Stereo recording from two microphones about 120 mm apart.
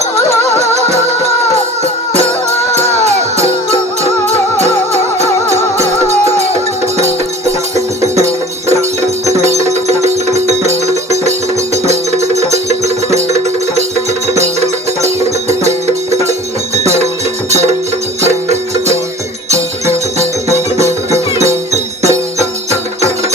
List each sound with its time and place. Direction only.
0.6 s music: 65° right (ahead or behind)
2.7 s music: 65° right (ahead or behind)
4.5 s music: 65° right (ahead or behind)
9.2 s music: 70° right (ahead or behind)
19.5 s music: 65° right (ahead or behind)
22.0 s music: 65° right (ahead or behind)